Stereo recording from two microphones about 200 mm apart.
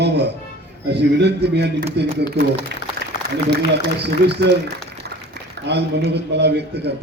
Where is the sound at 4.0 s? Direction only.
55° right (ahead or behind).